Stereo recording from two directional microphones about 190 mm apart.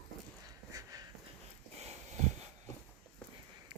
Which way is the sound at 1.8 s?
35° right (ahead or behind).